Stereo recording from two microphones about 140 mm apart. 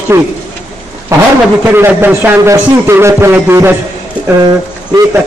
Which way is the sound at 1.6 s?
15° right (ahead or behind).